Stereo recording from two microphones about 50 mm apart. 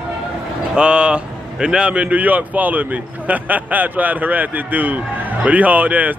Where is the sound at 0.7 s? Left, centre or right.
Centre.